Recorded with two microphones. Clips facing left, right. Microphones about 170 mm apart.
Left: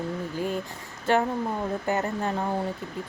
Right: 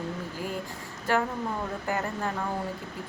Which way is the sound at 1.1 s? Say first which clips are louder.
Left 3 dB; 25° left (ahead or behind).